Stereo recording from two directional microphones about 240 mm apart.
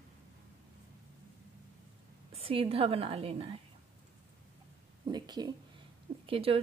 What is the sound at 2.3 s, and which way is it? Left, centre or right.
Speech, right.